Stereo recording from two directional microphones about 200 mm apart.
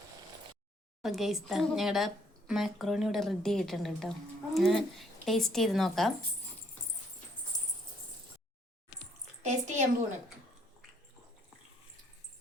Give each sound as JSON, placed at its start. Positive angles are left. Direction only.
{"t": 1.0, "sound": "a woman's voice", "side_deg": 0}
{"t": 7.5, "sound": "a sound", "side_deg": 20}
{"t": 9.4, "sound": "a woman's voice", "side_deg": -35}